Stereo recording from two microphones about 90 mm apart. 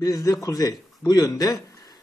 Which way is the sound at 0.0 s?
40° left (ahead or behind).